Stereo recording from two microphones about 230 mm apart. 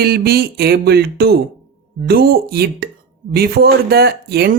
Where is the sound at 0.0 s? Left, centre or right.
Right.